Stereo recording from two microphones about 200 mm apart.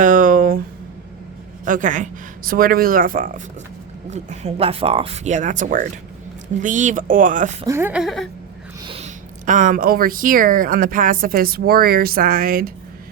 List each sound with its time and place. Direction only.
0.0 s a sound: 40° right (ahead or behind)
1.6 s speech: 40° right (ahead or behind)
7.7 s speech: 10° right (ahead or behind)
8.9 s speech: 35° right (ahead or behind)